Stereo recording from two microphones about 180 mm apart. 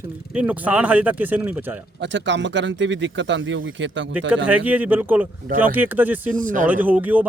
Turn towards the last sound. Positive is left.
turn(degrees=-10)  # may be behind; listen again after turning